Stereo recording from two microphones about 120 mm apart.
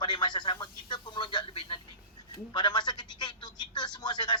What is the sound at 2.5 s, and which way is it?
Telephone, 40° left (ahead or behind).